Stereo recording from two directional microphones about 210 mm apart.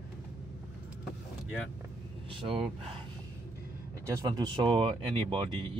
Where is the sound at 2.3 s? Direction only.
25° right (ahead or behind).